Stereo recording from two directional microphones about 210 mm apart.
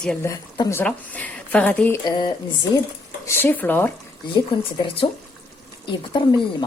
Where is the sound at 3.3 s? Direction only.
10° left (ahead or behind).